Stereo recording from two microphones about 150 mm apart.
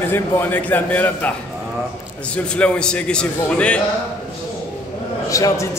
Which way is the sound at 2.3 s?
5° left (ahead or behind).